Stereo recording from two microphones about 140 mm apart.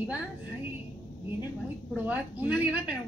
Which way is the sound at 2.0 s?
10° right (ahead or behind).